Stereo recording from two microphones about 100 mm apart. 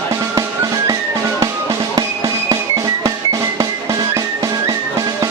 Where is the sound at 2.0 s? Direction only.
35° right (ahead or behind).